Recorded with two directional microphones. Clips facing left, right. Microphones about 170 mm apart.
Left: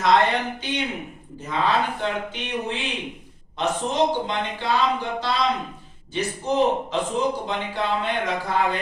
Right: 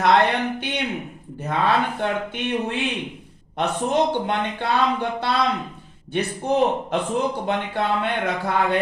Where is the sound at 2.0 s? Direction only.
55° right (ahead or behind).